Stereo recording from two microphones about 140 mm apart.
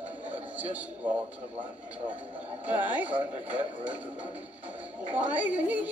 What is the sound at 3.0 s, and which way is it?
Speech, 10° right (ahead or behind).